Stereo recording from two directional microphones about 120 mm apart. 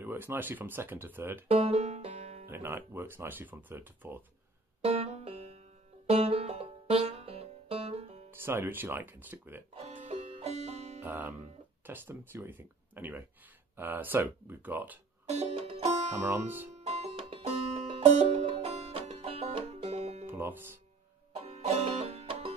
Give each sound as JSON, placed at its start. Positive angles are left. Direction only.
{"t": 0.0, "sound": "speech", "side_deg": -20}
{"t": 1.5, "sound": "music", "side_deg": -60}
{"t": 2.4, "sound": "speech", "side_deg": -20}
{"t": 4.8, "sound": "music", "side_deg": -60}
{"t": 8.3, "sound": "speech", "side_deg": -20}
{"t": 9.8, "sound": "music", "side_deg": -65}
{"t": 11.0, "sound": "music", "side_deg": -15}
{"t": 11.8, "sound": "speech", "side_deg": -15}
{"t": 15.2, "sound": "music", "side_deg": -55}
{"t": 16.2, "sound": "speech", "side_deg": -15}
{"t": 16.7, "sound": "music", "side_deg": -65}
{"t": 20.2, "sound": "music", "side_deg": -15}
{"t": 21.4, "sound": "music", "side_deg": -60}